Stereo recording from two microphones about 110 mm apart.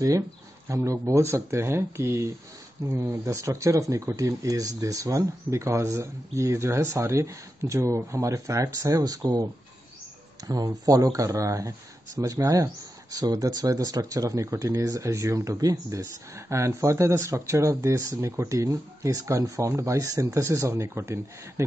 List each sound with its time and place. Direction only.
0.7 s speech: 30° right (ahead or behind)